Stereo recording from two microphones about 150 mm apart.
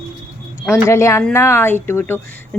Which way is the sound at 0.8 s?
20° left (ahead or behind).